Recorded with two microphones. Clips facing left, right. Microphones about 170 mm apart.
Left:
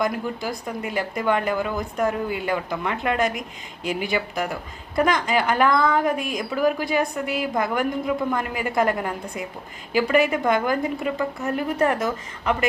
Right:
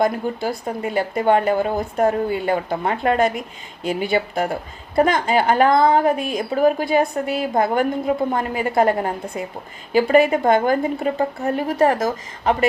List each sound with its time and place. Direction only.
0.0 s a woman's voice: 30° right (ahead or behind)